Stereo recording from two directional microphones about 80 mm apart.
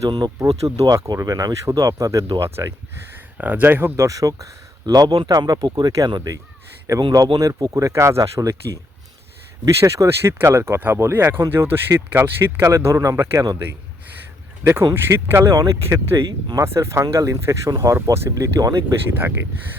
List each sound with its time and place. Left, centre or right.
0.3 s speech: right
3.3 s speech: right
4.0 s speech: right
6.9 s speech: right
14.6 s speech: right